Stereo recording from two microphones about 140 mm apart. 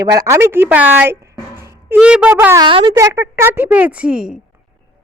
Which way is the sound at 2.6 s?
35° right (ahead or behind).